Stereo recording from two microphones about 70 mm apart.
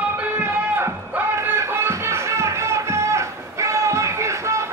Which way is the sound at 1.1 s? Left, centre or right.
Right.